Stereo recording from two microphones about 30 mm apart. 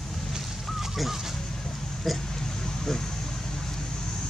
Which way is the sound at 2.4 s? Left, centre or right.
Centre.